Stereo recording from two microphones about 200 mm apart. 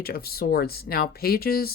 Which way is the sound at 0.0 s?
50° left (ahead or behind).